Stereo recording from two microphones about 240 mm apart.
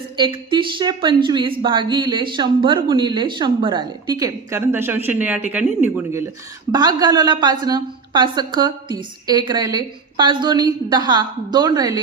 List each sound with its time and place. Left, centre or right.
0.2 s a woman's voice: centre